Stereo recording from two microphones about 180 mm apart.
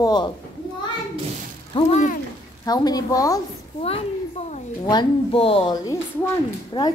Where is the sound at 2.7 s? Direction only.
20° left (ahead or behind).